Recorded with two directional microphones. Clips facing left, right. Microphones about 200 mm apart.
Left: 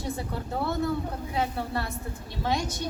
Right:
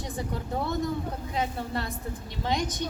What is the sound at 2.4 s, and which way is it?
Speech, 15° right (ahead or behind).